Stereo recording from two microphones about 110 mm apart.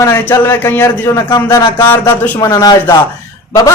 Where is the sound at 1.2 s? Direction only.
35° left (ahead or behind).